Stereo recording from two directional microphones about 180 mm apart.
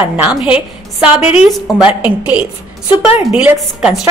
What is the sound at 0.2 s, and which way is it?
A woman's voice, 5° right (ahead or behind).